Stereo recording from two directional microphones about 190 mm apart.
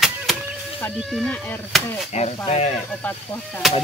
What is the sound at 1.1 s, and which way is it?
Music, 5° left (ahead or behind).